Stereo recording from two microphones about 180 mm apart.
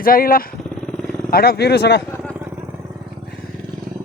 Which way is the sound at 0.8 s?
5° left (ahead or behind).